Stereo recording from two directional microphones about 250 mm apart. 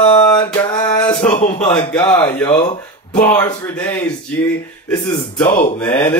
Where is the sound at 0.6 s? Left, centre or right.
Centre.